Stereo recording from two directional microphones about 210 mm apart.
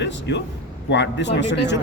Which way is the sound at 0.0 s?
55° left (ahead or behind).